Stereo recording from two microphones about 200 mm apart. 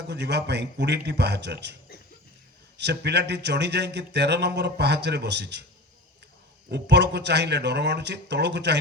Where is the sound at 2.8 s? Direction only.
55° right (ahead or behind).